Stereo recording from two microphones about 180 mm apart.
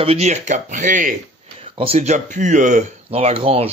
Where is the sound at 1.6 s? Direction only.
35° right (ahead or behind).